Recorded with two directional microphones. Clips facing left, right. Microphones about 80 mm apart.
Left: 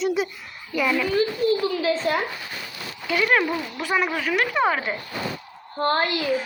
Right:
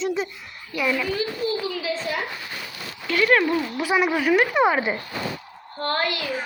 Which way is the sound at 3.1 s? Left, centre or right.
Centre.